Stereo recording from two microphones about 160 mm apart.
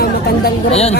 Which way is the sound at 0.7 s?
40° left (ahead or behind).